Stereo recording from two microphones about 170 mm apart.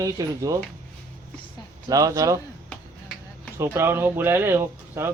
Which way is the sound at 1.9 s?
20° right (ahead or behind).